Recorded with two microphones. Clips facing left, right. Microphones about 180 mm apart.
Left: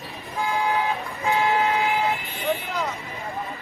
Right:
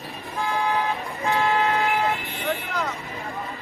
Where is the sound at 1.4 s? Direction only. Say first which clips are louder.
Right 1 dB; centre (ahead or behind).